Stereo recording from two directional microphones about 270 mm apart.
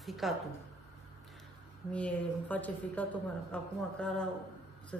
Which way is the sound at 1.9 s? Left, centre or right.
Centre.